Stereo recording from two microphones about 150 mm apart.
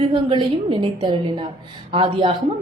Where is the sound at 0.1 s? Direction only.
35° right (ahead or behind).